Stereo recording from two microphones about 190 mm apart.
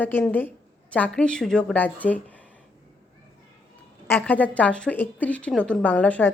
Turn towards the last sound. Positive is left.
turn(degrees=10)  # may be behind; listen again after turning